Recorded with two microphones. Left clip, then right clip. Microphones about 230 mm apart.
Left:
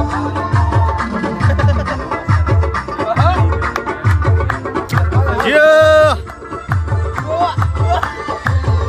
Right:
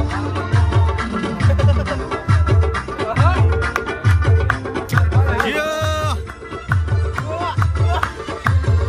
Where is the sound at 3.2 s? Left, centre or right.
Right.